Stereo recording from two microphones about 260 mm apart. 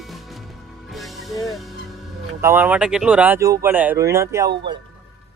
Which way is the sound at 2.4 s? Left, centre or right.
Centre.